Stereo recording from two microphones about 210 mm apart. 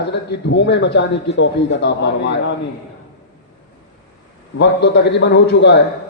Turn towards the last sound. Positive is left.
turn(degrees=55)  # may be behind; listen again after turning